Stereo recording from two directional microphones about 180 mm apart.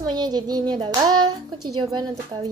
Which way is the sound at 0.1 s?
25° right (ahead or behind).